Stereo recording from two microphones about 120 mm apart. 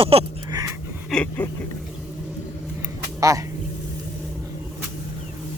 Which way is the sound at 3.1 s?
25° right (ahead or behind).